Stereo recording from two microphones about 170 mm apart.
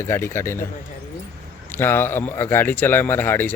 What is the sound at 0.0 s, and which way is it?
Speech, 15° left (ahead or behind).